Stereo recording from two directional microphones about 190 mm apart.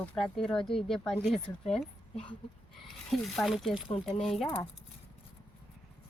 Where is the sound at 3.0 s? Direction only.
Centre (ahead or behind).